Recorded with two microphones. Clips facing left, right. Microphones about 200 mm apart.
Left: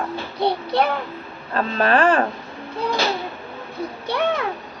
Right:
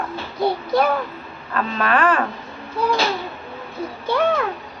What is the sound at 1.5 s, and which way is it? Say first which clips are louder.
Speech: left 2 dB; 35° left (ahead or behind).